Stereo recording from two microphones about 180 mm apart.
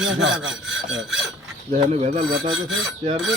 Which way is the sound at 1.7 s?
40° right (ahead or behind).